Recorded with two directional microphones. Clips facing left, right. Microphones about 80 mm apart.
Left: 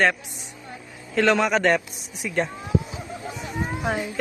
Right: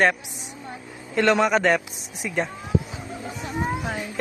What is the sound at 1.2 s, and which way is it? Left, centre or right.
A man's voice, centre.